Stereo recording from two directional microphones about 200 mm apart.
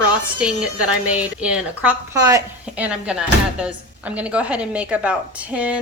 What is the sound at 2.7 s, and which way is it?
A woman's voice, 5° right (ahead or behind).